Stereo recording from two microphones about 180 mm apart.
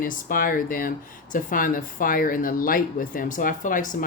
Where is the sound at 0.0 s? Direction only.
50° left (ahead or behind).